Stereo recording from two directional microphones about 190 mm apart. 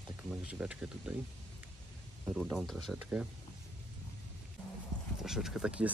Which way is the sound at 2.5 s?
Centre (ahead or behind).